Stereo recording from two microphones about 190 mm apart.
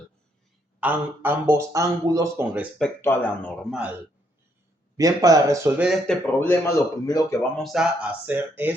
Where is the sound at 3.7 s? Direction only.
5° right (ahead or behind).